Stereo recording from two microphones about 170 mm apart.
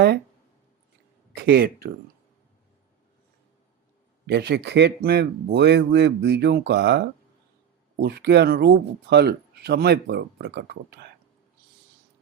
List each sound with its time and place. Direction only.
1.4 s speech: 65° right (ahead or behind)
4.3 s a man's voice: 80° right
7.9 s speech: 70° right (ahead or behind)